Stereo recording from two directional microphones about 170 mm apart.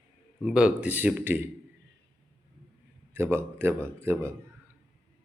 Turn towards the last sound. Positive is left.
turn(degrees=-15)  # may be behind; listen again after turning